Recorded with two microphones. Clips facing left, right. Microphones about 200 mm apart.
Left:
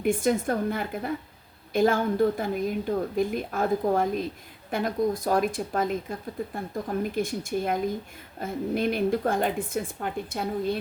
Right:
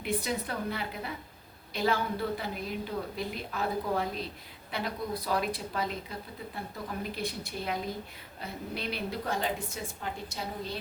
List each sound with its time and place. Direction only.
0.0 s a woman's voice: 50° left (ahead or behind)